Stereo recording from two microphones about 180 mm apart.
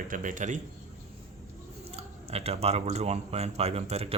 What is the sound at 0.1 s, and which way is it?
Speech, 45° right (ahead or behind).